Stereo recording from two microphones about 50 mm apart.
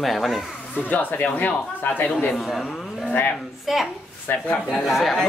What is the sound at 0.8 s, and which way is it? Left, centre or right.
Speech, left.